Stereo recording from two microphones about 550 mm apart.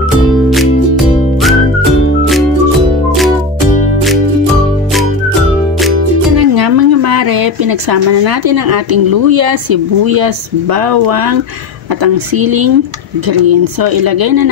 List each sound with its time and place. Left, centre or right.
0.5 s music: centre
6.3 s a woman's voice: right